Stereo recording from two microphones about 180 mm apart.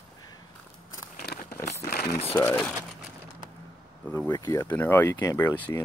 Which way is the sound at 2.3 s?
10° left (ahead or behind).